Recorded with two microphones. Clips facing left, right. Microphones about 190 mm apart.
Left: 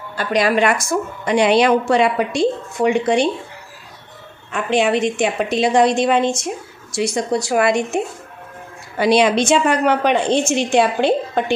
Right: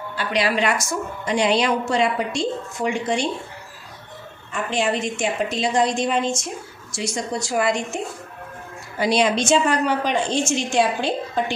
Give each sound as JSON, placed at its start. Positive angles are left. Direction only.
{"t": 0.1, "sound": "a woman's voice", "side_deg": 45}
{"t": 4.5, "sound": "a woman's voice", "side_deg": 65}